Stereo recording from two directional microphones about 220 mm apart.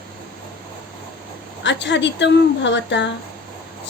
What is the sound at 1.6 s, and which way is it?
Speech, 55° left (ahead or behind).